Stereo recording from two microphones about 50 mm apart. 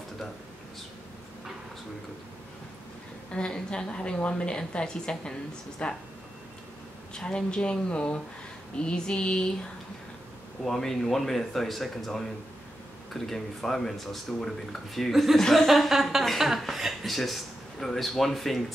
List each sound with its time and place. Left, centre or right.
3.3 s a woman's voice: centre
7.2 s a woman's voice: centre
10.6 s speech: centre